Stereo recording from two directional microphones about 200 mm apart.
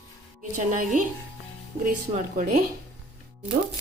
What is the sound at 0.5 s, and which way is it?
A woman's voice, 40° right (ahead or behind).